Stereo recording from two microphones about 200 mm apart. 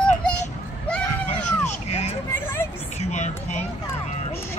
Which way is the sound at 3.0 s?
35° left (ahead or behind).